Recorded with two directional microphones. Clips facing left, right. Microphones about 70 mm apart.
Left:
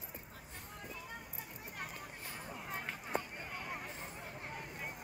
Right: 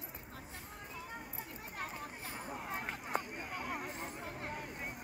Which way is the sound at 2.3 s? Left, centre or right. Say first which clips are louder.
Right 2 dB; right.